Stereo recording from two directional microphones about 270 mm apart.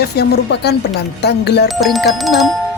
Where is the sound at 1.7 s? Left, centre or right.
Centre.